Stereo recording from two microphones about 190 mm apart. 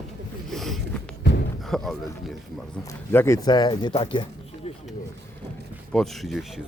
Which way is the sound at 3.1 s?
15° left (ahead or behind).